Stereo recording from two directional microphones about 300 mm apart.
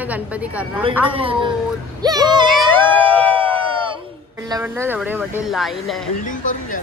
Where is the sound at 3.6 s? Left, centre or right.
Centre.